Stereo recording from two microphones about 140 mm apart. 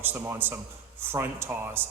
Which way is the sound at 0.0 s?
15° right (ahead or behind).